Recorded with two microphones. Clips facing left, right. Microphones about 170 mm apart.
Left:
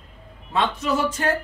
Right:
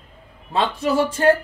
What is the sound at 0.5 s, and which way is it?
Speech, 30° right (ahead or behind).